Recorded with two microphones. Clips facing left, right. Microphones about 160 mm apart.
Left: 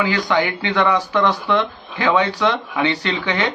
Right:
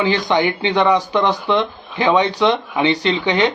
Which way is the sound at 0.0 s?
20° right (ahead or behind).